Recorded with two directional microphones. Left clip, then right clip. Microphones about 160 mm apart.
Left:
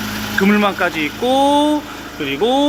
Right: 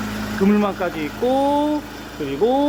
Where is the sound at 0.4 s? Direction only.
5° right (ahead or behind).